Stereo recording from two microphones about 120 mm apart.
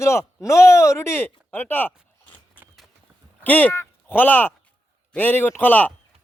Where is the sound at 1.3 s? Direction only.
15° left (ahead or behind).